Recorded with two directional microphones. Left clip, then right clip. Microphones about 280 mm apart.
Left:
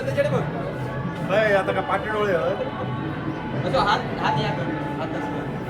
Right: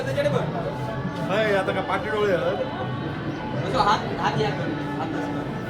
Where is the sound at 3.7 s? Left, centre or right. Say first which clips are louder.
Even; right.